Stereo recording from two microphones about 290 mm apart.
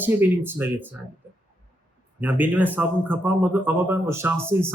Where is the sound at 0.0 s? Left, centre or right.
Centre.